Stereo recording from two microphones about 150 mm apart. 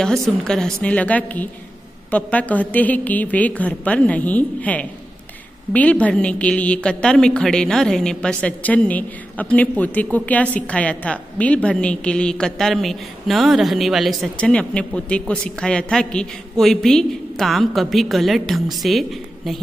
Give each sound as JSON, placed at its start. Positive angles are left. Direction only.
{"t": 0.0, "sound": "a woman's voice", "side_deg": 5}